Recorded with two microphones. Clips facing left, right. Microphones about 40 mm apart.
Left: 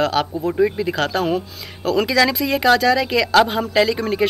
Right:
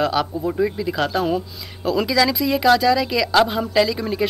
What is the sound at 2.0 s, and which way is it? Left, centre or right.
Speech, left.